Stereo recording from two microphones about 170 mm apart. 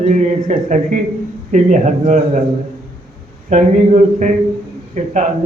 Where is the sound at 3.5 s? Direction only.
45° right (ahead or behind).